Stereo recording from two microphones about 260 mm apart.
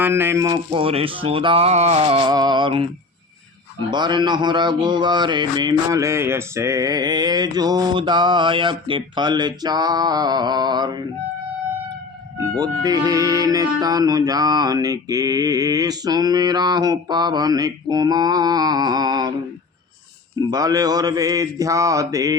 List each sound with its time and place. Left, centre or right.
0.0 s speech: centre
3.9 s speech: centre
12.5 s speech: centre
20.5 s speech: centre